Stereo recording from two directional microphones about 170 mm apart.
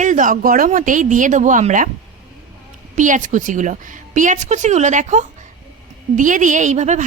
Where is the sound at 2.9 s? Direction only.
50° right (ahead or behind).